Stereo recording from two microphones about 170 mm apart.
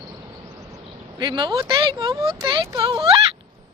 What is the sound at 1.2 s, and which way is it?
Speech, 25° right (ahead or behind).